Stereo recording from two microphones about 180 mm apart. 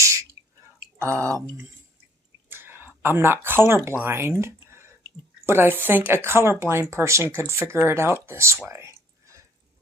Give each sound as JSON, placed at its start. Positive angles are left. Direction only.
{"t": 1.0, "sound": "speech", "side_deg": -15}
{"t": 2.5, "sound": "a sound", "side_deg": -10}
{"t": 4.0, "sound": "speech", "side_deg": -10}